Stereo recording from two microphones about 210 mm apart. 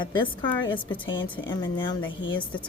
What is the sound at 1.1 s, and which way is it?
Speech, 65° left (ahead or behind).